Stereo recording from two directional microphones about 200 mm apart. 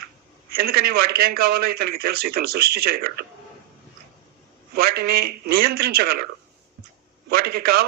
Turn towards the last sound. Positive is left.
turn(degrees=-50)  # may be behind; listen again after turning